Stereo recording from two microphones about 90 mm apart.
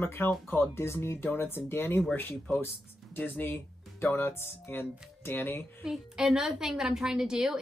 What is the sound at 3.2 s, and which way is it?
Speech, 25° left (ahead or behind).